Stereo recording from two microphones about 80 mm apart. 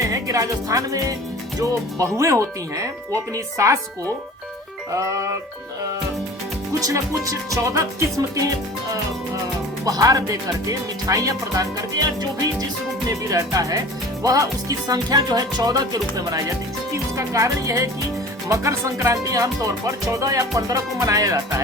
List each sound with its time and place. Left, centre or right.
0.1 s music: right
1.5 s speech: right
4.9 s speech: right
6.7 s speech: right
9.8 s speech: right
13.1 s speech: right
17.2 s speech: right